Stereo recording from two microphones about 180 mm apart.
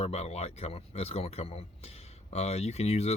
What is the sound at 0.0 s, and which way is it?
Speech, 35° left (ahead or behind).